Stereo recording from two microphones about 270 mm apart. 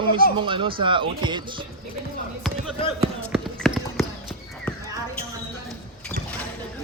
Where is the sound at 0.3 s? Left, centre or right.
Centre.